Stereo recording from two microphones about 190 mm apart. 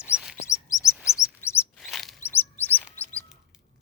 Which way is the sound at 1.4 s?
15° left (ahead or behind).